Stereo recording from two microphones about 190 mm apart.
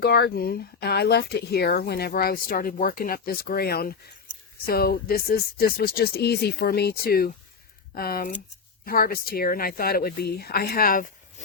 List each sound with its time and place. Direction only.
0.0 s speech: 60° left (ahead or behind)